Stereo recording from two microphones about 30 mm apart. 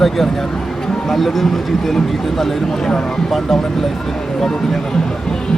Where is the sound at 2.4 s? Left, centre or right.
Left.